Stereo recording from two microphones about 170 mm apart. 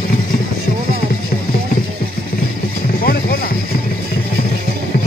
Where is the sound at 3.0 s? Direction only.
65° left (ahead or behind).